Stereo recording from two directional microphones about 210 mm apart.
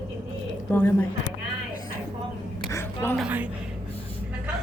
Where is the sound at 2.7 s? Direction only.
10° left (ahead or behind).